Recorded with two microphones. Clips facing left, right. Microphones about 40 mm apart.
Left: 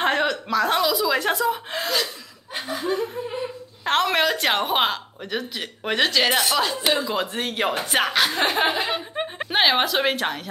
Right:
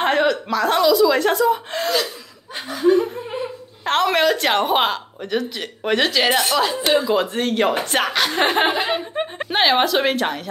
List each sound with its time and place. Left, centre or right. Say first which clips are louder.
0.0 s speech: right 4 dB; centre
3.8 s speech: right 3 dB; centre
8.5 s speech: right 3 dB; right
9.1 s a woman's voice: right 2 dB; centre